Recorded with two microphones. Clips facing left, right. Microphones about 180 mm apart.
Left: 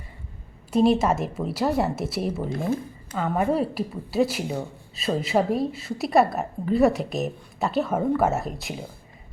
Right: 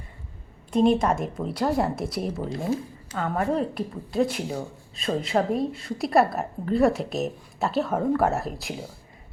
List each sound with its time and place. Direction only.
0.7 s speech: 5° left (ahead or behind)
2.5 s speech: 50° left (ahead or behind)
3.2 s speech: 10° left (ahead or behind)